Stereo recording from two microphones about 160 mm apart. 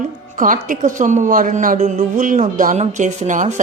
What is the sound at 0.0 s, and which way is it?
A woman's voice, 55° right (ahead or behind).